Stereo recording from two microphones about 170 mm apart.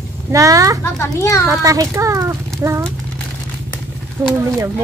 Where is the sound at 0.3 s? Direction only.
20° right (ahead or behind).